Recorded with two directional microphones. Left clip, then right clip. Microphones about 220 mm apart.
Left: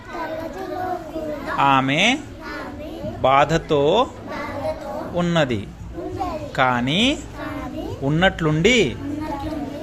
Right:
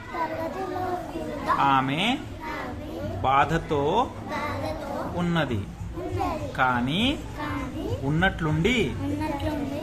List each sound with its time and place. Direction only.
1.5 s a man's voice: 30° left (ahead or behind)
3.2 s a man's voice: 30° left (ahead or behind)
5.1 s a man's voice: 30° left (ahead or behind)
6.6 s a man's voice: 30° left (ahead or behind)